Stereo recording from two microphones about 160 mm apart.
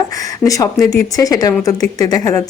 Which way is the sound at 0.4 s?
20° left (ahead or behind).